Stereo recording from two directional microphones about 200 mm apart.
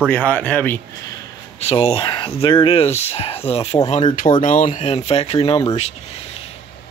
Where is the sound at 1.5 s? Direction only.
30° left (ahead or behind).